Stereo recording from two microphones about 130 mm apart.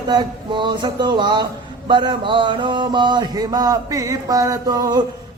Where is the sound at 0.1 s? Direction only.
35° right (ahead or behind).